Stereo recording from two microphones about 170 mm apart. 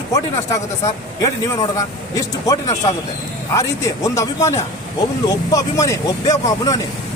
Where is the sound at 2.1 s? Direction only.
20° left (ahead or behind).